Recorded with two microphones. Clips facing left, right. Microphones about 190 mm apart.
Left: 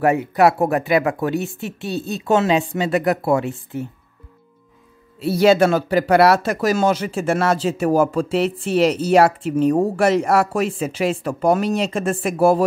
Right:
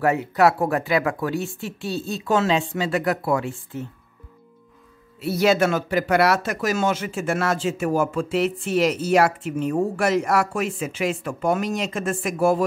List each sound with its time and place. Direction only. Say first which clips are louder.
0.0 s speech: left 3 dB; 15° left (ahead or behind)
5.2 s speech: left 5 dB; 30° left (ahead or behind)